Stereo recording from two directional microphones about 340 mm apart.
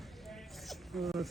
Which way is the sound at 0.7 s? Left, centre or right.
Centre.